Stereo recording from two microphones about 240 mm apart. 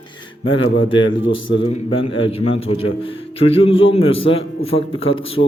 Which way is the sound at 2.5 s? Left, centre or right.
Left.